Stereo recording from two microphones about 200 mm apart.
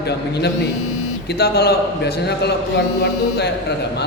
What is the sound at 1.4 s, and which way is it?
Speech, 55° left (ahead or behind).